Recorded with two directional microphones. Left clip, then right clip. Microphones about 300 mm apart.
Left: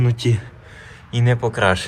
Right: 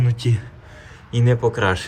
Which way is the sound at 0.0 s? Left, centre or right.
Centre.